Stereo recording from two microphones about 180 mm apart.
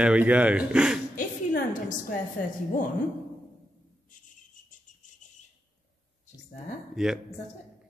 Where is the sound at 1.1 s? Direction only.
50° left (ahead or behind).